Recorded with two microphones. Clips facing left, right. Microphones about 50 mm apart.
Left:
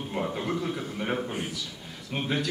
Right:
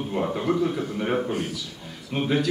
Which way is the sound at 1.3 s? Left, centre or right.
Centre.